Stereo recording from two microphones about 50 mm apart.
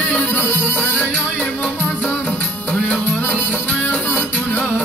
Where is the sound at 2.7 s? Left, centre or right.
Left.